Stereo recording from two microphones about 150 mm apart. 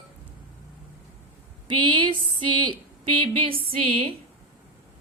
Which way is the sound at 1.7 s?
30° right (ahead or behind).